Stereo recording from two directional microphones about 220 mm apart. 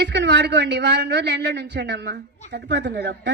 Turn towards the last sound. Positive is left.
turn(degrees=-50)  # may be behind; listen again after turning